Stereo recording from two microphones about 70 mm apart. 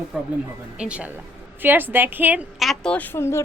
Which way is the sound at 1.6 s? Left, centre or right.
Right.